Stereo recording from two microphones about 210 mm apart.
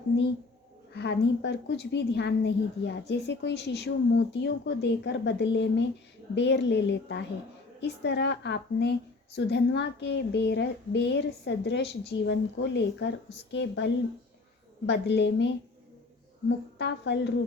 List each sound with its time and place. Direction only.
0.9 s a woman's voice: 55° left (ahead or behind)
16.5 s a woman's voice: 55° left (ahead or behind)